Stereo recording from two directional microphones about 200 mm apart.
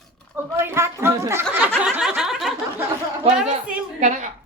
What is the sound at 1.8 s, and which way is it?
Snicker, 5° right (ahead or behind).